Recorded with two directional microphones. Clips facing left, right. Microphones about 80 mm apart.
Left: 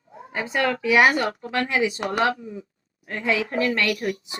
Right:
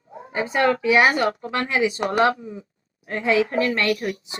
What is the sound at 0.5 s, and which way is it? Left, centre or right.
Speech, right.